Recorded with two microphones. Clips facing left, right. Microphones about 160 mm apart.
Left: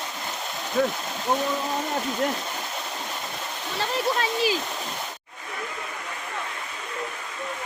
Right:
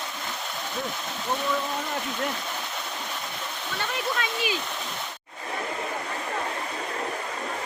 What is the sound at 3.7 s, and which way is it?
Stream, 35° left (ahead or behind).